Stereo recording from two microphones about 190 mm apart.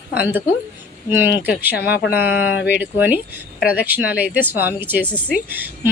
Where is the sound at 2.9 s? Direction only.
10° right (ahead or behind).